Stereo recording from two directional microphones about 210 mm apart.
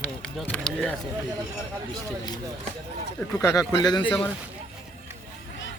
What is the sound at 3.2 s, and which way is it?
Speech, 15° left (ahead or behind).